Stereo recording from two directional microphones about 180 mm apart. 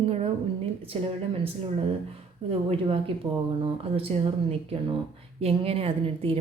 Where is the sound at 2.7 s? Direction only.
30° right (ahead or behind).